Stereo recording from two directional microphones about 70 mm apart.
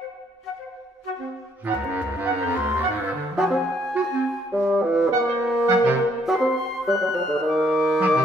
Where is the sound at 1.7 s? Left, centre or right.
Right.